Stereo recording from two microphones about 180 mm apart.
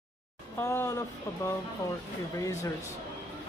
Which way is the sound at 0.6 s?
15° left (ahead or behind).